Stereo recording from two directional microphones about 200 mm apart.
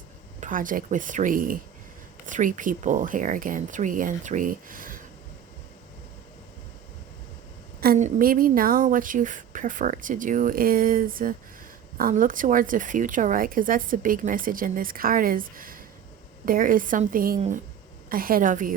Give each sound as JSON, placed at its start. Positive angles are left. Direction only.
{"t": 0.3, "sound": "speech", "side_deg": -40}
{"t": 7.8, "sound": "a woman's voice", "side_deg": -40}